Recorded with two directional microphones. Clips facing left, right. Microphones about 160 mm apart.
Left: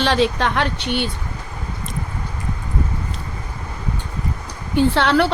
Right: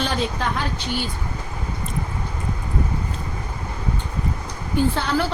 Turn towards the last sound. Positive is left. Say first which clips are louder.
# left 5 dB
turn(degrees=75)  # may be behind; listen again after turning